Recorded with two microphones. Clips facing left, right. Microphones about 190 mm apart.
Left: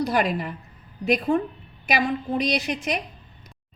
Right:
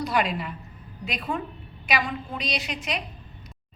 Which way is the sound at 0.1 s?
45° left (ahead or behind).